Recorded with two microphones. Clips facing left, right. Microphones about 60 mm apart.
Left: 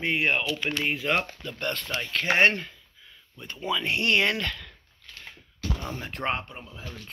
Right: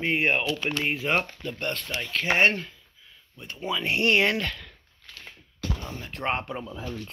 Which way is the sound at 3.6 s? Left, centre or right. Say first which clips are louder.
Right 1 dB; right.